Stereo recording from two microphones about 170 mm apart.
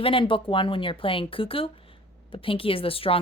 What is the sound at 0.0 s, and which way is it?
Speech, 30° left (ahead or behind).